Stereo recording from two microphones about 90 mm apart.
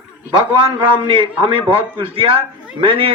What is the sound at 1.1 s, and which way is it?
Speech, 75° right (ahead or behind).